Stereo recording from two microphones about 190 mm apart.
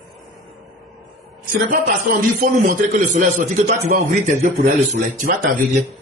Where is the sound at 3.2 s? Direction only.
40° right (ahead or behind).